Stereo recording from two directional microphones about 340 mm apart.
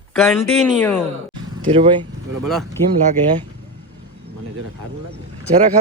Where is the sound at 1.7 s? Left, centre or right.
Centre.